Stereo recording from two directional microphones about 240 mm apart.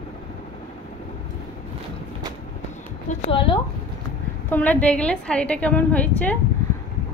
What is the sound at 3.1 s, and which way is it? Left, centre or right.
Speech, left.